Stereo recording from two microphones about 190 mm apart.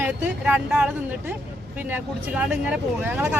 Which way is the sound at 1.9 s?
5° right (ahead or behind).